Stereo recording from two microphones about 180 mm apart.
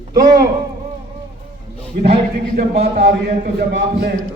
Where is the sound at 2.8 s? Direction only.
70° right (ahead or behind).